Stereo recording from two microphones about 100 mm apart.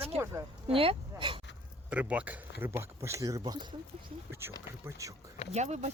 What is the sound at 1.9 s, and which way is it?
Speech, 15° right (ahead or behind).